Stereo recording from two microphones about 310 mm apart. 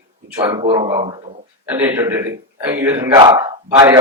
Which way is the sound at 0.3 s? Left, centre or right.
Centre.